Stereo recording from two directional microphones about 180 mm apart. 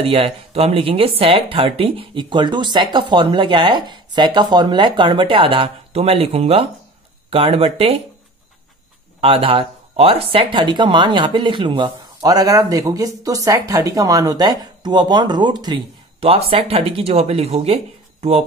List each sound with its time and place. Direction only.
0.0 s speech: 35° right (ahead or behind)
9.2 s speech: 30° right (ahead or behind)